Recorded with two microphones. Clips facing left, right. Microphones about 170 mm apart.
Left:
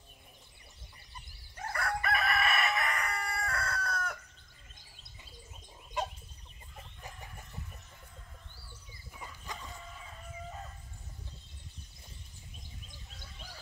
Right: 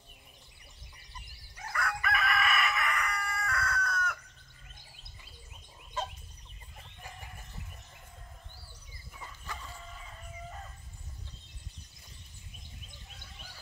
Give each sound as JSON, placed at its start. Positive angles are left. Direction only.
{"t": 1.6, "sound": "crowing", "side_deg": 35}